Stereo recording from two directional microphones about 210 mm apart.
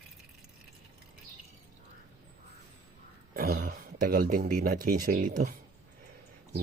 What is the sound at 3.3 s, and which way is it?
Speech, 45° right (ahead or behind).